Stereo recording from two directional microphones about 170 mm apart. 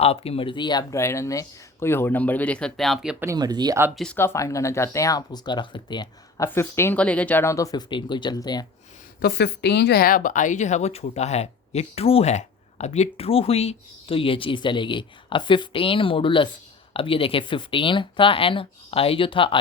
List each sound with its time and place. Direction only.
0.0 s speech: 35° left (ahead or behind); by 3.2 s 5° right (ahead or behind)
3.2 s speech: 25° right (ahead or behind)
3.9 s speech: 5° left (ahead or behind); by 8.6 s 25° left (ahead or behind)
9.2 s speech: 80° left; by 19.5 s 30° left (ahead or behind)